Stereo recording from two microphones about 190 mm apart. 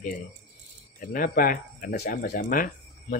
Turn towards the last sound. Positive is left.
turn(degrees=50)  # may be behind; listen again after turning